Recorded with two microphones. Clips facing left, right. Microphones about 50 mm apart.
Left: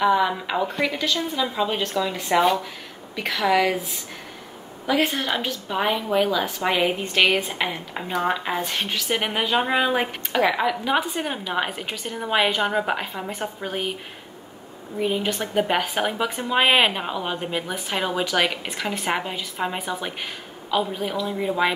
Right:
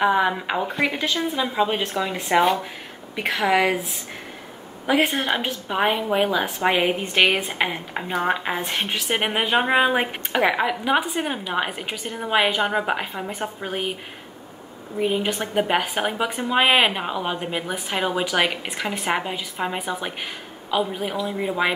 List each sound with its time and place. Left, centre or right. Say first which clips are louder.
0.0 s a woman's voice: even; right
2.2 s speech: right 1 dB; centre
3.2 s a woman's voice: right 1 dB; right
4.8 s a woman's voice: right 2 dB; right; by 13.9 s centre
15.0 s speech: right 1 dB; centre